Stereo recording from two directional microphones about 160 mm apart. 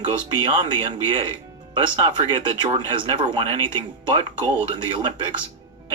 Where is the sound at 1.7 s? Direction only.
30° right (ahead or behind).